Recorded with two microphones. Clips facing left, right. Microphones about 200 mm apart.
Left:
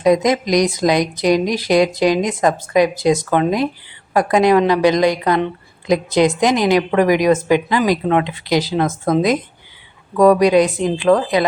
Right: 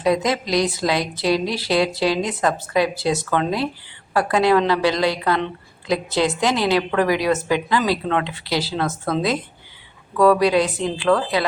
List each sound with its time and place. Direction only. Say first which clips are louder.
0.0 s speech: left 5 dB; 15° left (ahead or behind)